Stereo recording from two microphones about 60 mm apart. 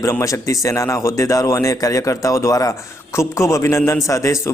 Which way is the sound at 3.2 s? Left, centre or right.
Left.